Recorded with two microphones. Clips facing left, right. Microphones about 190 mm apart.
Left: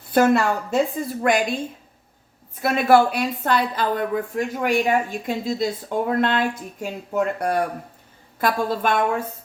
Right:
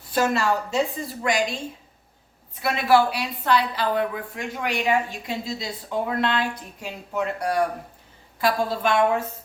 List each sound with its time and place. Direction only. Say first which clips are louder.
0.1 s a woman's voice: left 5 dB; 55° left (ahead or behind)